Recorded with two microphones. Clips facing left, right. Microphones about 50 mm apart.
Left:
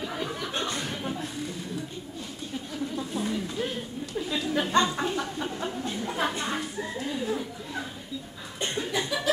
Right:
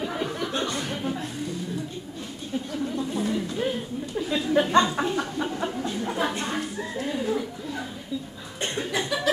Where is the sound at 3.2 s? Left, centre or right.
Centre.